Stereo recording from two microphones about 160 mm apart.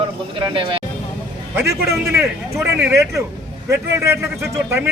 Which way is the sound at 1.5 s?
15° right (ahead or behind).